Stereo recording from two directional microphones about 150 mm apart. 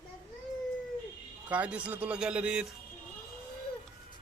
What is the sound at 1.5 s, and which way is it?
A man's voice, 10° right (ahead or behind).